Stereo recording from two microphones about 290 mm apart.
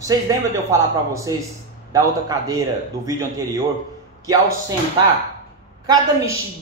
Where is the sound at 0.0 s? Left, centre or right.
Centre.